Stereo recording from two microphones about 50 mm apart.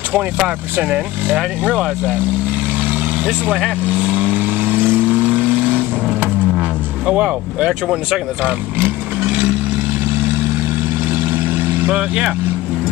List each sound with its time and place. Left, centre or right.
0.8 s speech: centre
4.0 s vehicle: right
7.1 s speech: right
11.2 s vehicle: right
11.9 s speech: centre